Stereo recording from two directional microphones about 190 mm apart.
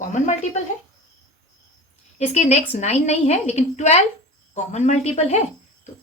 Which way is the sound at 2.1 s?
35° left (ahead or behind).